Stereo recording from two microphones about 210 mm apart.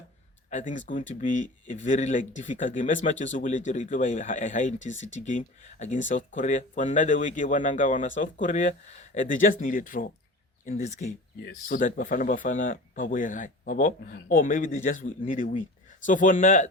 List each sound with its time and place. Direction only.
0.5 s speech: 35° left (ahead or behind)